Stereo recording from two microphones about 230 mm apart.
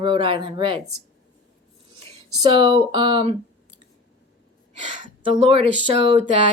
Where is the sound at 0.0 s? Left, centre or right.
Right.